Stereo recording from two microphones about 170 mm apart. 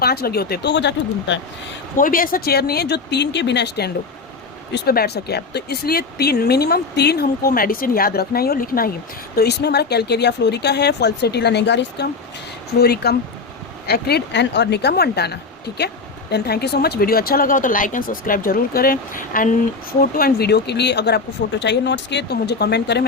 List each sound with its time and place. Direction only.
0.0 s speech: 65° left (ahead or behind); by 1.4 s 90° left
2.0 s speech: 55° left (ahead or behind)
9.3 s speech: 70° left (ahead or behind); by 12.0 s 90° left
12.8 s speech: 70° left (ahead or behind)